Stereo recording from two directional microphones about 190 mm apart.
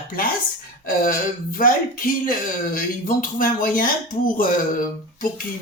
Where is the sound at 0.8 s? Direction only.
45° left (ahead or behind).